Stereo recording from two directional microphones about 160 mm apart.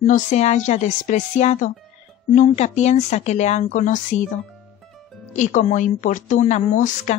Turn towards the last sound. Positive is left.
turn(degrees=50)  # may be behind; listen again after turning